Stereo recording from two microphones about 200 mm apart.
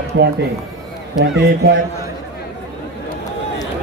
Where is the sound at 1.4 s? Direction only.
55° right (ahead or behind).